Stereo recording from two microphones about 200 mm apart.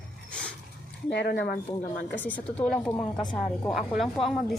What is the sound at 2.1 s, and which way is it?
Speech, 10° left (ahead or behind).